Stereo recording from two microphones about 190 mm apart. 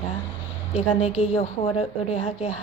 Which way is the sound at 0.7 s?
35° left (ahead or behind).